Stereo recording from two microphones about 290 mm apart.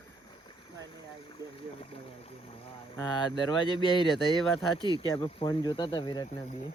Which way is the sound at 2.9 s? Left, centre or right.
Centre.